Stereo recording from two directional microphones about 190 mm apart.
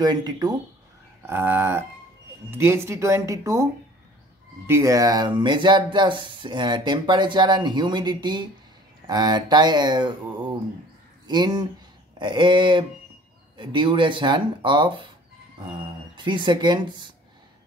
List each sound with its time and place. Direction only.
0.0 s speech: 20° right (ahead or behind)
1.2 s speech: 10° right (ahead or behind)
4.6 s speech: 15° right (ahead or behind)
11.2 s speech: 20° right (ahead or behind)
16.2 s speech: 25° right (ahead or behind)